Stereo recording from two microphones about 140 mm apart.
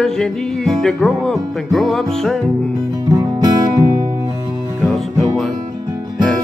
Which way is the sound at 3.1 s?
25° right (ahead or behind).